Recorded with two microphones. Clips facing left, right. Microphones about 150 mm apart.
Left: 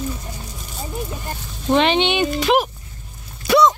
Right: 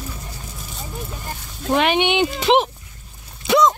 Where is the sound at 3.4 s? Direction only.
20° right (ahead or behind).